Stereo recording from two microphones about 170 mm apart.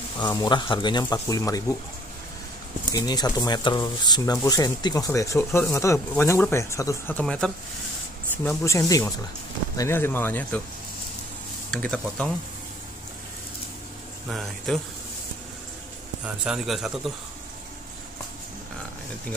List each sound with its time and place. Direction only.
0.2 s speech: 25° left (ahead or behind)
2.9 s speech: 25° left (ahead or behind)
7.2 s a man's voice: 5° left (ahead or behind)
8.5 s speech: 15° left (ahead or behind)
11.7 s a man's voice: 5° left (ahead or behind)
14.3 s a man's voice: centre (ahead or behind)
16.3 s a man's voice: 5° right (ahead or behind)